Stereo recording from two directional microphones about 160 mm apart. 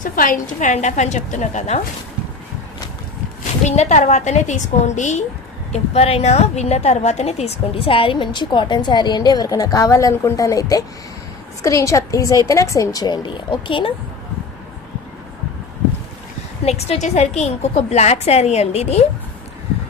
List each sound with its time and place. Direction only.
0.0 s a woman's voice: 55° left (ahead or behind)
3.7 s a woman's voice: 45° left (ahead or behind)
16.6 s a woman's voice: 40° left (ahead or behind)